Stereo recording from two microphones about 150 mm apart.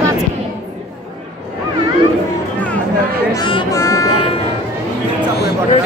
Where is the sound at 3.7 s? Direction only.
20° left (ahead or behind).